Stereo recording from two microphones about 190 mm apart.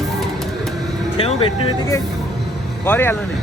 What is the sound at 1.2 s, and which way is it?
Speech, 30° left (ahead or behind).